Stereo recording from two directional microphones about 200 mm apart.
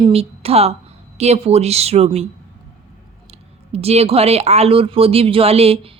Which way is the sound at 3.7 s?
30° right (ahead or behind).